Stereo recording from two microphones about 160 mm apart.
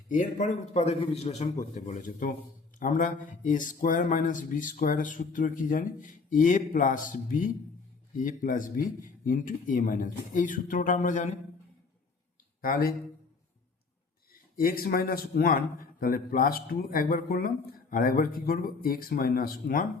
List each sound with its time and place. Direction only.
0.1 s a man's voice: 50° left (ahead or behind)
12.6 s a man's voice: 65° left (ahead or behind)
14.5 s a man's voice: 65° left (ahead or behind)